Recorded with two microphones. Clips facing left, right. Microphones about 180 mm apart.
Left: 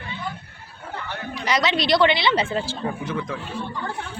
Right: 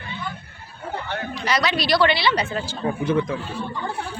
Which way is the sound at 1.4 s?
20° left (ahead or behind).